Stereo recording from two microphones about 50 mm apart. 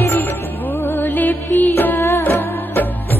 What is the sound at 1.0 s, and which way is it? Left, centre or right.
Music, left.